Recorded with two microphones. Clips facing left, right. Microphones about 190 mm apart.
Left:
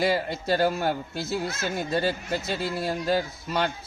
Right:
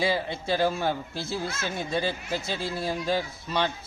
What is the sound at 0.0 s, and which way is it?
Speech, centre (ahead or behind).